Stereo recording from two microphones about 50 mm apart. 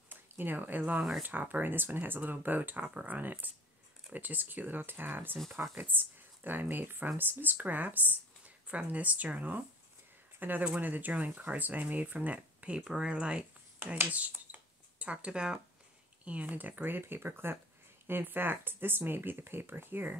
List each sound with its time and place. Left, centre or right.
0.1 s speech: right
14.3 s a sound: right
16.3 s speech: right